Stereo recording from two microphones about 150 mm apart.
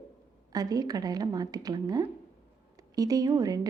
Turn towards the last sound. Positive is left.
turn(degrees=-25)  # may be behind; listen again after turning